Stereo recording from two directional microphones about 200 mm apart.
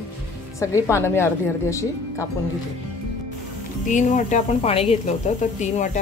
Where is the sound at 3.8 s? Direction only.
40° left (ahead or behind).